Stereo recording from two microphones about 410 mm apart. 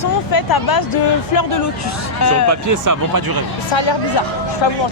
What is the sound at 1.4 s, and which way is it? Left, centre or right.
Speech, left.